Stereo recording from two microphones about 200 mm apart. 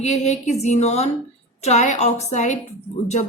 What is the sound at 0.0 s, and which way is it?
Speech, 35° left (ahead or behind).